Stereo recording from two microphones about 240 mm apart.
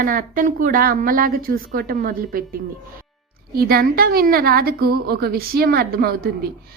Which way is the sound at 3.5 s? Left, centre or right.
Right.